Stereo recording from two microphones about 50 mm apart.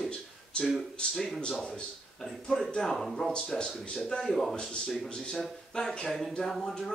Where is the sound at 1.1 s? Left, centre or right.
Centre.